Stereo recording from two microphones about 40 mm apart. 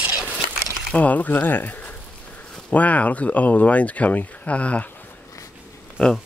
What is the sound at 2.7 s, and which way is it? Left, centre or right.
Speech, left.